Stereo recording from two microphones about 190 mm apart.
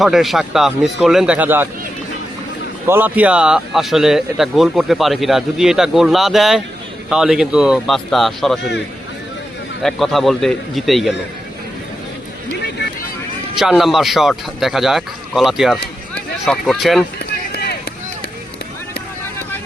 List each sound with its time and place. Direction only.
0.0 s speech: centre (ahead or behind)
2.8 s speech: 10° right (ahead or behind)
9.8 s speech: centre (ahead or behind)
13.6 s speech: centre (ahead or behind)
17.2 s run: 60° left (ahead or behind)